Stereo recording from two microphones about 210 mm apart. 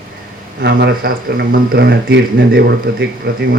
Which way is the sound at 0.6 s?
50° right (ahead or behind).